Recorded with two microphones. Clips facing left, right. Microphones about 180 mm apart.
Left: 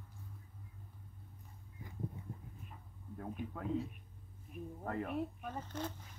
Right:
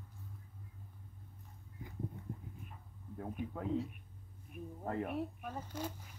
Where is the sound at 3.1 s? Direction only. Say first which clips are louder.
Right 2 dB; 20° right (ahead or behind).